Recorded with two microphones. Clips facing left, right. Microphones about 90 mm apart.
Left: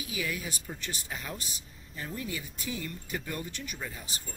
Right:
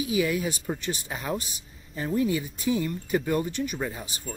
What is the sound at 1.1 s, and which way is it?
Speech, 40° right (ahead or behind).